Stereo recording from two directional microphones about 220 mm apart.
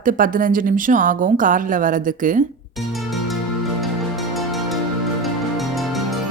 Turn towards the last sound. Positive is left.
turn(degrees=0)  # may be behind; listen again after turning